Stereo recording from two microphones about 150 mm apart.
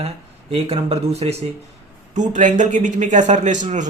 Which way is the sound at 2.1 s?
55° right (ahead or behind).